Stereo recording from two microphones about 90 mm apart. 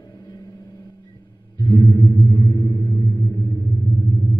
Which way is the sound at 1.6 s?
45° left (ahead or behind).